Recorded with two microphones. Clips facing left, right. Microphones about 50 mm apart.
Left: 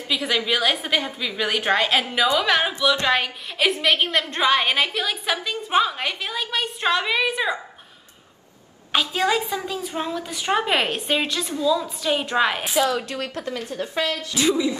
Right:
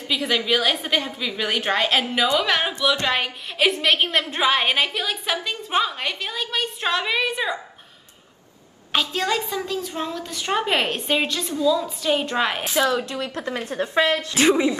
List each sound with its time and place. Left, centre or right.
0.1 s a woman's voice: centre
9.1 s a woman's voice: centre
12.7 s a woman's voice: right